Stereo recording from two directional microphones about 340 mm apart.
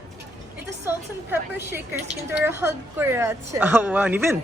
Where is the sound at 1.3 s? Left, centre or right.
Centre.